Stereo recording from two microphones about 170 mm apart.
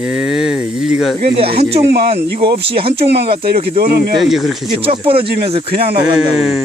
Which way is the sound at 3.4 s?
65° right (ahead or behind).